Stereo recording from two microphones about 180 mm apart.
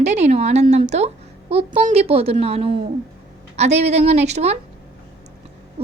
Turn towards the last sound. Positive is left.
turn(degrees=-35)  # may be behind; listen again after turning